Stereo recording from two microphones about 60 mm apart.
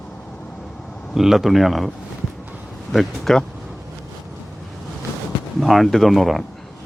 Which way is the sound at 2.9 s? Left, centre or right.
Centre.